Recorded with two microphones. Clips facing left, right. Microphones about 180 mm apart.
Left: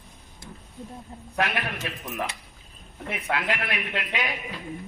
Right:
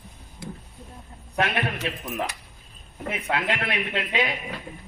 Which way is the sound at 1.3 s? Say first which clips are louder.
Right 2 dB; 25° right (ahead or behind).